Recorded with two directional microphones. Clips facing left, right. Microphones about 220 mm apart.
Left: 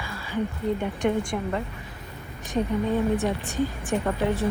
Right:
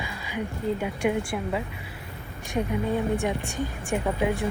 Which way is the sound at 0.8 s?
10° right (ahead or behind).